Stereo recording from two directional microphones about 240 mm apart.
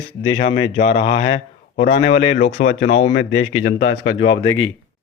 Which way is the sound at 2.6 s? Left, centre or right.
Left.